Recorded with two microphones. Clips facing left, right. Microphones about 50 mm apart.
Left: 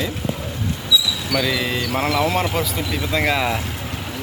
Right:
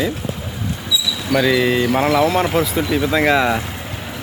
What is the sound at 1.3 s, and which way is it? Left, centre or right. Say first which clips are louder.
Speech: right 7 dB; centre.